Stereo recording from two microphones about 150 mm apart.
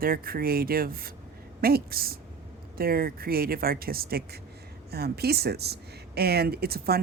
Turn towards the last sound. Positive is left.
turn(degrees=-90)